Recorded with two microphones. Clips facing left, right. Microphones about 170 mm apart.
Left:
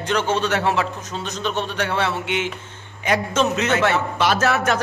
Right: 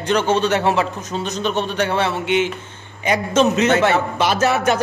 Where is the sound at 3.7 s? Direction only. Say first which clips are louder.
Right 3 dB; 30° right (ahead or behind).